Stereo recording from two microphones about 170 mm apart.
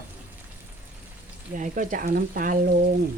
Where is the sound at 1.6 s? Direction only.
50° right (ahead or behind).